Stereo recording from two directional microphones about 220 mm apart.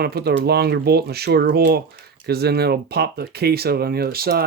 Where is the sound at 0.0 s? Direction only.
45° right (ahead or behind).